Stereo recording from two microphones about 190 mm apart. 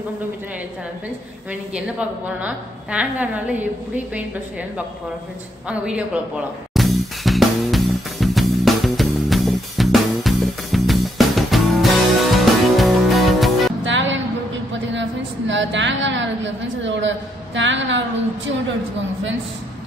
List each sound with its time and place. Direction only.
1.5 s a woman's voice: 5° right (ahead or behind)
5.7 s a woman's voice: 5° right (ahead or behind)
6.7 s music: centre (ahead or behind)
13.8 s music: 75° right (ahead or behind)
14.7 s a sound: 75° right (ahead or behind)